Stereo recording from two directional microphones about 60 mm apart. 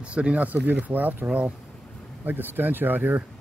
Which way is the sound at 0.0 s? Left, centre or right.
Right.